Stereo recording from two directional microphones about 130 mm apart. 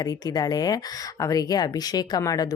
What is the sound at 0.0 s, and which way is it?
Speech, 30° left (ahead or behind).